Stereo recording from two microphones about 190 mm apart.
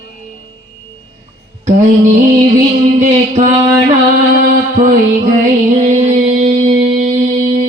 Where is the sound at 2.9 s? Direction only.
40° right (ahead or behind).